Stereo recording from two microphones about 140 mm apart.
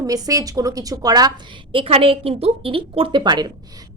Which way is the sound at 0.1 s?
25° right (ahead or behind).